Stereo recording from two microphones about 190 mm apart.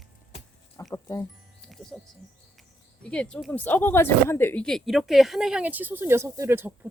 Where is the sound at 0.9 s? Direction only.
15° left (ahead or behind).